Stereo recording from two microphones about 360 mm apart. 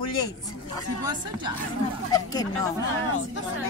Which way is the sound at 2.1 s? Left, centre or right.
Centre.